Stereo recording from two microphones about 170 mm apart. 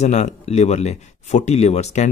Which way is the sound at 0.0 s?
40° left (ahead or behind).